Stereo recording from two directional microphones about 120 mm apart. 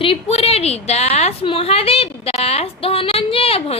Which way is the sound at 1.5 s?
55° left (ahead or behind).